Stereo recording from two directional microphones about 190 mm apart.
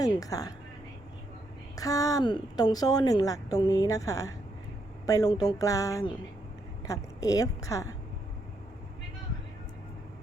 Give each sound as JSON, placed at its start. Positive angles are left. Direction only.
{"t": 0.0, "sound": "a woman's voice", "side_deg": 20}
{"t": 1.7, "sound": "a woman's voice", "side_deg": 20}